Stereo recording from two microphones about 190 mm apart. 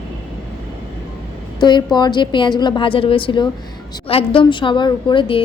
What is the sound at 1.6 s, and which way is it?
A woman's voice, 25° left (ahead or behind).